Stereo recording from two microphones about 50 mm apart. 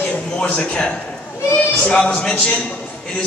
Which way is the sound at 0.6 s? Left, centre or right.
Left.